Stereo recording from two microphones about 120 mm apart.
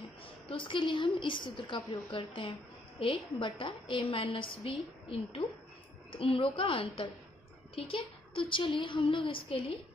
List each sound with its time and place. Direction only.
0.2 s a woman's voice: 45° left (ahead or behind)